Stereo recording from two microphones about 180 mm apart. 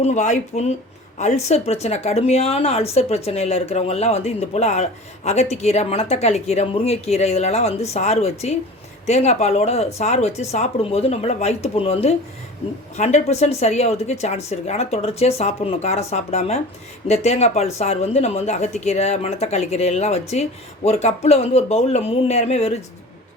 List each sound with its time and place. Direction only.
0.0 s speech: 40° left (ahead or behind)